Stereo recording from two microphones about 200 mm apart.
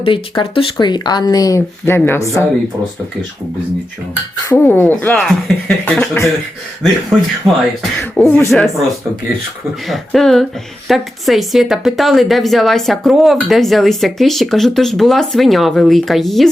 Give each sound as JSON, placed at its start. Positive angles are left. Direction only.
{"t": 0.0, "sound": "speech", "side_deg": 25}
{"t": 4.1, "sound": "speech", "side_deg": 10}
{"t": 9.8, "sound": "speech", "side_deg": 0}